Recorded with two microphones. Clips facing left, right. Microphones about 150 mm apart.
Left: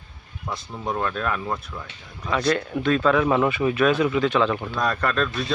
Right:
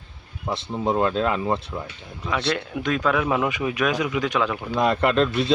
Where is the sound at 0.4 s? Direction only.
25° right (ahead or behind).